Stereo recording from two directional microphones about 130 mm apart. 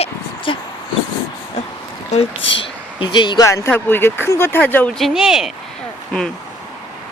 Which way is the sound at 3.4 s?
25° left (ahead or behind).